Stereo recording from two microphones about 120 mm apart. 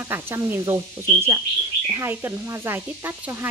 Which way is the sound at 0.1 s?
20° right (ahead or behind).